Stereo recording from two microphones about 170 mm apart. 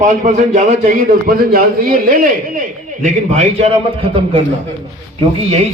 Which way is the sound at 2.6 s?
45° right (ahead or behind).